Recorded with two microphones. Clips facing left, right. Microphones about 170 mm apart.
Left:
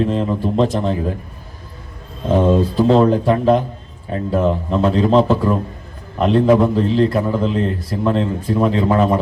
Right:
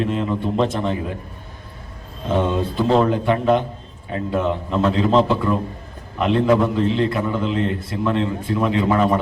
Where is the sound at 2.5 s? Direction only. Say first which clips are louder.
Left 6 dB; 35° left (ahead or behind).